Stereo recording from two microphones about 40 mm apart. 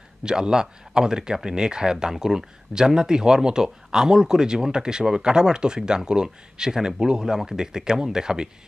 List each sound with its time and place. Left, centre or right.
0.2 s speech: centre